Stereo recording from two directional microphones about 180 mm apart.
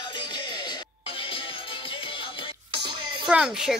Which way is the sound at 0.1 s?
25° left (ahead or behind).